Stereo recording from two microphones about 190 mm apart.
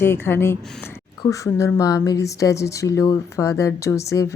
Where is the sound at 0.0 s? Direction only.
10° left (ahead or behind).